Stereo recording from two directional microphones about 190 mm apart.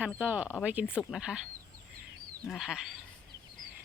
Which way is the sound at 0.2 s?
10° right (ahead or behind).